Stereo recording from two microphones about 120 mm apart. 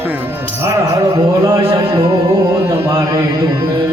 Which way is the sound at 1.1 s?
30° right (ahead or behind).